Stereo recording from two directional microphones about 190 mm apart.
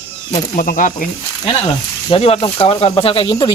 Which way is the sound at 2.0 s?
30° left (ahead or behind).